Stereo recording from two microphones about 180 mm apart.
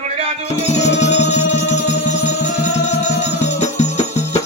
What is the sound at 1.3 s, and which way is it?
Music, 40° left (ahead or behind).